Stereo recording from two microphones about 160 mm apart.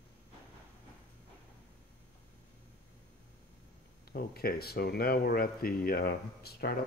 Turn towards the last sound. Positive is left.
turn(degrees=75)  # may be behind; listen again after turning